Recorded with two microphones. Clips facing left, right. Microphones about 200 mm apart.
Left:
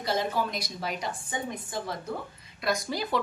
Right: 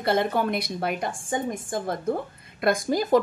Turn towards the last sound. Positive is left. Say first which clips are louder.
# right 9 dB
turn(degrees=-45)  # may be behind; listen again after turning